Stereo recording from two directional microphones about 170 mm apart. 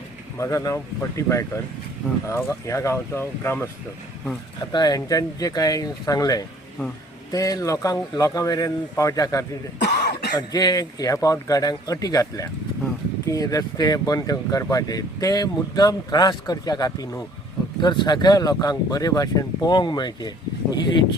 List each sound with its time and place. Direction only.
0.3 s speech: 20° left (ahead or behind)
9.8 s cough: 75° left (ahead or behind)
10.3 s speech: 25° left (ahead or behind)